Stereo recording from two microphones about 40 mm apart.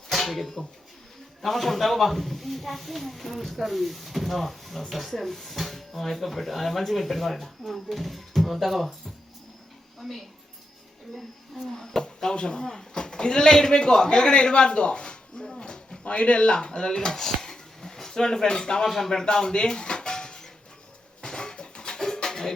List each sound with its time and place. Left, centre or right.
0.1 s music: centre
1.4 s speech: centre
10.0 s speech: centre
19.2 s dishes: centre
21.2 s a sound: centre